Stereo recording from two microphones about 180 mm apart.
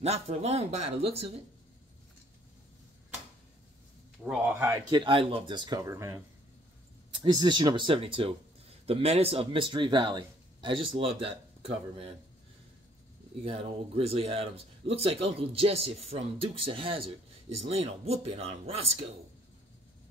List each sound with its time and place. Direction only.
0.0 s speech: 35° right (ahead or behind)
4.2 s speech: 5° right (ahead or behind)
4.8 s speech: 25° right (ahead or behind)
13.4 s speech: 35° right (ahead or behind)